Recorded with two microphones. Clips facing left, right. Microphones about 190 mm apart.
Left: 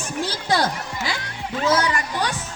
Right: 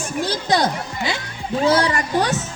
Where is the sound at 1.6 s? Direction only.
30° right (ahead or behind).